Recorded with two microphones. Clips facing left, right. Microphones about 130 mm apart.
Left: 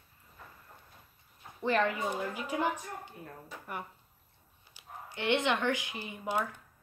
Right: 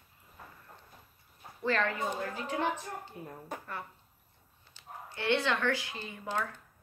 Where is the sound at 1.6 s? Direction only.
15° left (ahead or behind).